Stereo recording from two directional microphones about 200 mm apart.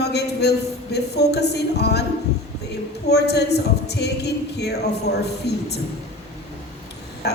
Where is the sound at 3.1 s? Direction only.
55° left (ahead or behind).